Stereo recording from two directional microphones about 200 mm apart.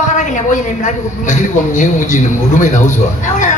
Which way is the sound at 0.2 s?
40° left (ahead or behind).